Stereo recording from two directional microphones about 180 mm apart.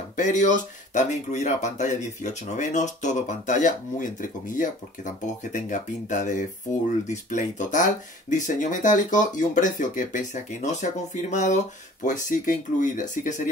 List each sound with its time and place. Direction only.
0.1 s speech: 45° left (ahead or behind)